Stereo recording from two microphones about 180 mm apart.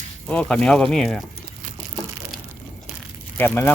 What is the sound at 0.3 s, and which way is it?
Speech, 5° left (ahead or behind).